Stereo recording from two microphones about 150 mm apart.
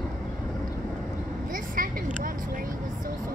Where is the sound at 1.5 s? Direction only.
65° right (ahead or behind).